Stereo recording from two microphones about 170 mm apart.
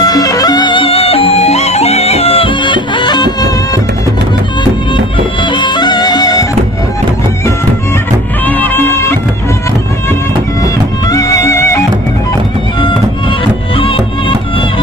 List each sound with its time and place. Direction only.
0.0 s music: 20° left (ahead or behind)
5.4 s music: 30° left (ahead or behind)
8.5 s music: 10° left (ahead or behind)
11.1 s music: 20° left (ahead or behind)
13.7 s music: 30° left (ahead or behind)